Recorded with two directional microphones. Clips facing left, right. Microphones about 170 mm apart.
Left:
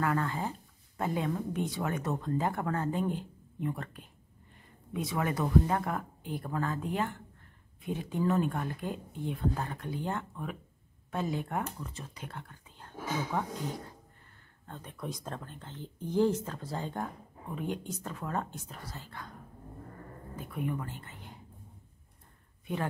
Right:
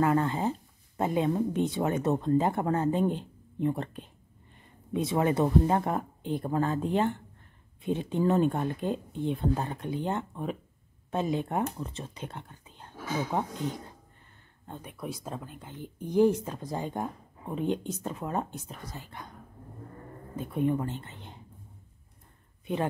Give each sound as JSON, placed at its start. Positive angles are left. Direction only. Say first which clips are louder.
{"t": 0.0, "sound": "speech", "louder": "right 6 dB", "side_deg": -25}
{"t": 14.7, "sound": "speech", "louder": "right 2 dB", "side_deg": -10}
{"t": 20.3, "sound": "speech", "louder": "right 8 dB", "side_deg": -25}